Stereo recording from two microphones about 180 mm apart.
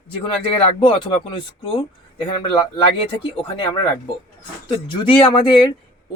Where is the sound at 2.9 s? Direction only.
30° left (ahead or behind).